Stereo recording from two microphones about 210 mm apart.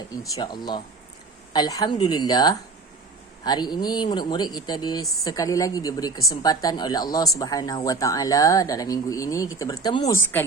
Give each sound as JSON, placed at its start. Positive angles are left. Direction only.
{"t": 0.1, "sound": "speech", "side_deg": 15}